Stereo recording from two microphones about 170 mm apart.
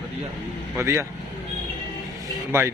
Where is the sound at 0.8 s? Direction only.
15° right (ahead or behind).